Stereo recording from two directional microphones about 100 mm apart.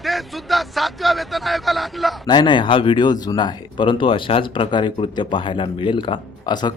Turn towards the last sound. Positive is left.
turn(degrees=45)  # may be behind; listen again after turning